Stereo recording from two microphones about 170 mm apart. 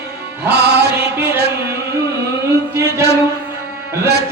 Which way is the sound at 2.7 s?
15° right (ahead or behind).